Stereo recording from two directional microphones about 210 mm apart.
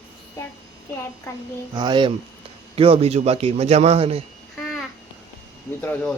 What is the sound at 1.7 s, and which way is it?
A man's voice, 20° right (ahead or behind).